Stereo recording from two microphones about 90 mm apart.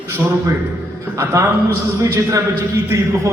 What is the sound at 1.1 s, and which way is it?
A man's voice, 35° right (ahead or behind).